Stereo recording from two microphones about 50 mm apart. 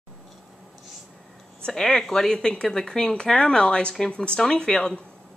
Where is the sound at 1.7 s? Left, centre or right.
Centre.